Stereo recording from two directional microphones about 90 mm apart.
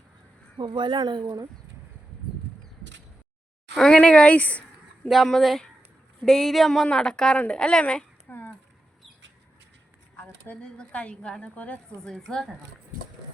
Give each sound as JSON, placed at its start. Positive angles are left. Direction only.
{"t": 0.6, "sound": "speech", "side_deg": -60}
{"t": 3.8, "sound": "a woman's voice", "side_deg": 10}
{"t": 5.0, "sound": "a woman's voice", "side_deg": 0}
{"t": 10.2, "sound": "a woman's voice", "side_deg": 20}
{"t": 12.0, "sound": "speech", "side_deg": 5}